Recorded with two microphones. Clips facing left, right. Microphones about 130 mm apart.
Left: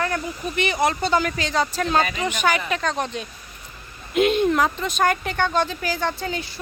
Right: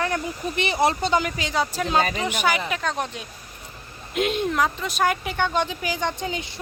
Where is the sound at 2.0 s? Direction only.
35° right (ahead or behind).